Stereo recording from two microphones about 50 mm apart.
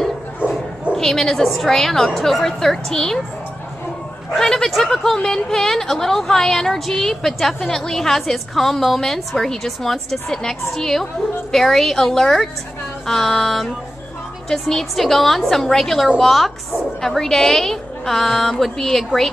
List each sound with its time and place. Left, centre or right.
0.9 s speech: centre
4.4 s a woman's voice: centre